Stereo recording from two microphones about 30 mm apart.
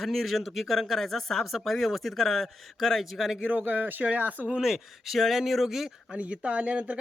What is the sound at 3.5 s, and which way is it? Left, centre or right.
Speech, right.